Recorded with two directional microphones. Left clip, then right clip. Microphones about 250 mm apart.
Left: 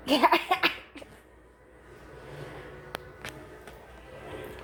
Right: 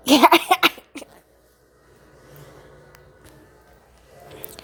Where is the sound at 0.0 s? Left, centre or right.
Right.